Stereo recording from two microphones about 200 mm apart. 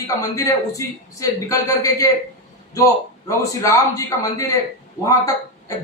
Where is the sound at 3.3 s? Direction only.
15° left (ahead or behind).